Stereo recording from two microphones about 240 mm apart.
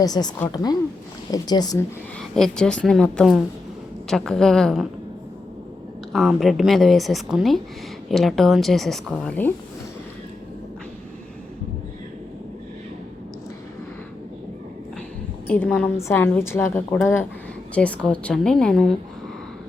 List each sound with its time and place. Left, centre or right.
0.0 s a woman's voice: centre
2.3 s a woman's voice: centre
6.1 s a woman's voice: centre
15.4 s a woman's voice: centre